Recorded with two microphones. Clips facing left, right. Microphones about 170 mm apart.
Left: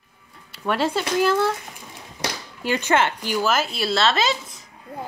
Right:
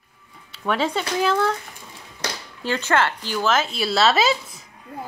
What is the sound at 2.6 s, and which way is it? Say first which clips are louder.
Speech: left 1 dB; 15° left (ahead or behind).